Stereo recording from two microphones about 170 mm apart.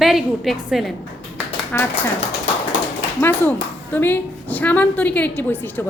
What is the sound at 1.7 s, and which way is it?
Speech, 10° left (ahead or behind).